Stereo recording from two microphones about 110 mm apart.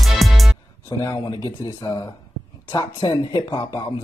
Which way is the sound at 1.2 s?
40° left (ahead or behind).